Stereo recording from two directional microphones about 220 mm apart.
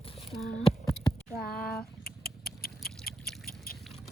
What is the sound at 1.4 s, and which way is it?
Rodents, 45° left (ahead or behind).